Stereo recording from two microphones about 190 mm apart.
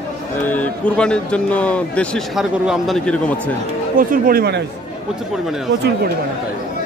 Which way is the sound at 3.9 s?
50° right (ahead or behind).